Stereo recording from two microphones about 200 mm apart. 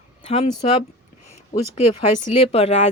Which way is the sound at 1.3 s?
30° left (ahead or behind).